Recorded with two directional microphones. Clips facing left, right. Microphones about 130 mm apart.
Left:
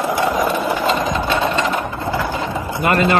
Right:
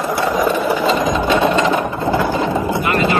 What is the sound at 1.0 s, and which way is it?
Sewing machine, 15° right (ahead or behind).